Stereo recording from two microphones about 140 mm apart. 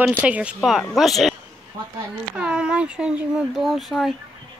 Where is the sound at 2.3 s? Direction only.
5° right (ahead or behind).